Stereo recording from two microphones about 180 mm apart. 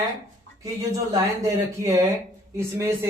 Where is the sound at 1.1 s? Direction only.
20° right (ahead or behind).